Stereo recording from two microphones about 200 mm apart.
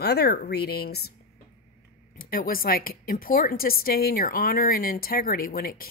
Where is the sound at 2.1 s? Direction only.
45° left (ahead or behind).